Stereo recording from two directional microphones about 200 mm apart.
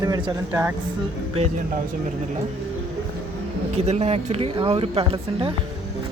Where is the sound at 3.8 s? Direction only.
30° right (ahead or behind).